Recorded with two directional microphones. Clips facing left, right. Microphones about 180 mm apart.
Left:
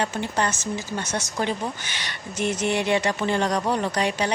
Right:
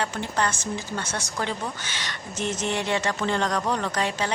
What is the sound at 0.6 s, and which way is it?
Speech, 10° right (ahead or behind).